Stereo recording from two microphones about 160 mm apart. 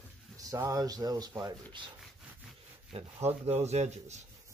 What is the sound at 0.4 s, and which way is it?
Speech, 20° right (ahead or behind).